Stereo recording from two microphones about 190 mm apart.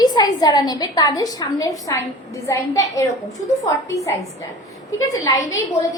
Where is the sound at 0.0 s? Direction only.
20° left (ahead or behind).